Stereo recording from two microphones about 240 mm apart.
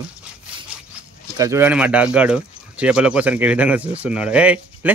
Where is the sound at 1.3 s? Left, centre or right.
Centre.